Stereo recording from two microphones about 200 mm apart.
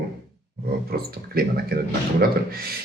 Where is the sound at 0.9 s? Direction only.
50° right (ahead or behind).